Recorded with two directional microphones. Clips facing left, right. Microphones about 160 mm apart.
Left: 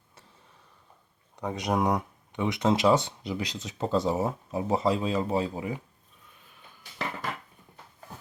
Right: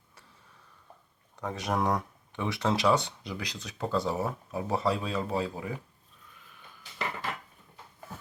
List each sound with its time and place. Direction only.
1.4 s speech: 15° left (ahead or behind)